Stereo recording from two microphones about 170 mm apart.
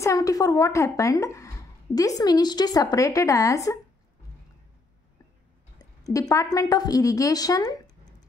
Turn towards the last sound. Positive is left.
turn(degrees=20)  # may be behind; listen again after turning